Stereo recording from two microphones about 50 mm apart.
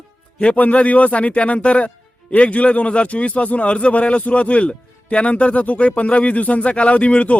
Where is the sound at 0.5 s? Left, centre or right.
Left.